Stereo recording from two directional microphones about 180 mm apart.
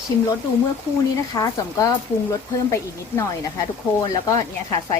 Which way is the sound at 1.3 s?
20° left (ahead or behind).